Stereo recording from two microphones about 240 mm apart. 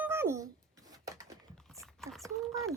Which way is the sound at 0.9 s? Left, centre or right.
Centre.